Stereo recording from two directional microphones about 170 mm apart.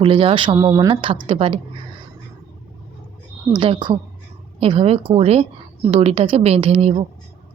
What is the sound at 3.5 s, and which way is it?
A woman's voice, 30° right (ahead or behind).